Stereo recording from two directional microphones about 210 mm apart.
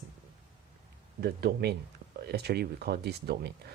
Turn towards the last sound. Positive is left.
turn(degrees=-50)  # may be behind; listen again after turning